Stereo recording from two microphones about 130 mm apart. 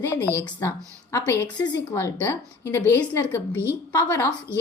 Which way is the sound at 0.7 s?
25° left (ahead or behind).